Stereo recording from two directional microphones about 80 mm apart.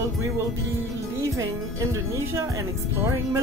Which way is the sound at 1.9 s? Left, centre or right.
Right.